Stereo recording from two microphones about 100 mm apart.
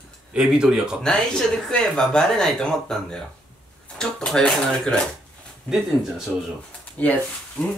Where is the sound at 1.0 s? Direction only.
5° left (ahead or behind).